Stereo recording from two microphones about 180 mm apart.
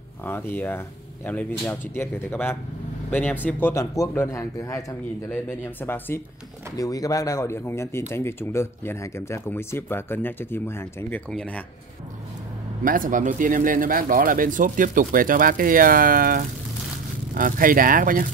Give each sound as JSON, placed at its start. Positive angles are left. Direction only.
{"t": 0.2, "sound": "speech", "side_deg": 10}
{"t": 12.8, "sound": "speech", "side_deg": -50}